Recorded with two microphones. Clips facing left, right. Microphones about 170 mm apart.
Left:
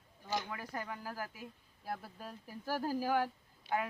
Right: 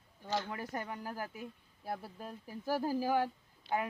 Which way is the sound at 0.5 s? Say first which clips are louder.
Right 2 dB; 25° right (ahead or behind).